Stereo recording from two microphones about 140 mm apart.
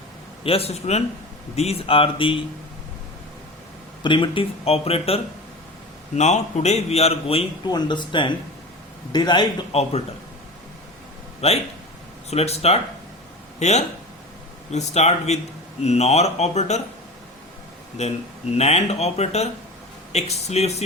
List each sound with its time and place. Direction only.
0.4 s a man's voice: 45° left (ahead or behind)
4.0 s a man's voice: 35° left (ahead or behind)
7.7 s speech: 30° left (ahead or behind)
11.3 s a man's voice: 45° left (ahead or behind)
18.0 s a man's voice: 50° left (ahead or behind)